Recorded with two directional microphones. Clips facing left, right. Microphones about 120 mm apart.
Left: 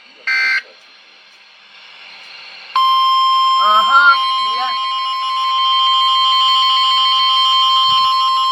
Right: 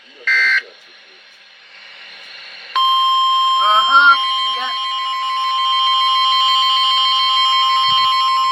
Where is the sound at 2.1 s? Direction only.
35° left (ahead or behind).